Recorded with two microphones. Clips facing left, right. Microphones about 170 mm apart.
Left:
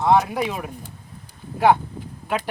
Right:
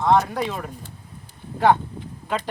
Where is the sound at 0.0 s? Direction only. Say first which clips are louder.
Left 1 dB; 10° left (ahead or behind).